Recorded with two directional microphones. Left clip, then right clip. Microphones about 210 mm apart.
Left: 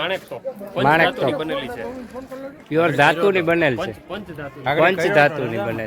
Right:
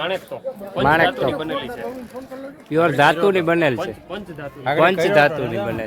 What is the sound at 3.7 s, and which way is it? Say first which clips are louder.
Speech: even; 30° left (ahead or behind).